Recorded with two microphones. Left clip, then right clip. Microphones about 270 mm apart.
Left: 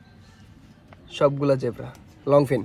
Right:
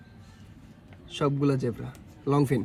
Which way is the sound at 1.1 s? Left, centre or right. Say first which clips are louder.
Left 7 dB; centre.